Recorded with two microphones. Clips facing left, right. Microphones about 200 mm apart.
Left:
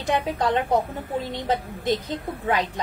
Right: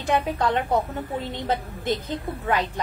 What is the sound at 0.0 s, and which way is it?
A woman's voice, 15° left (ahead or behind).